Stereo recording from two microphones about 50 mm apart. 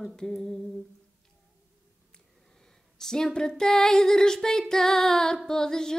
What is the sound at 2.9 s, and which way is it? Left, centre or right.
Speech, centre.